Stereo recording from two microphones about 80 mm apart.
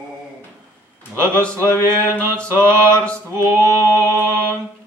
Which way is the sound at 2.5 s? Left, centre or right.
Right.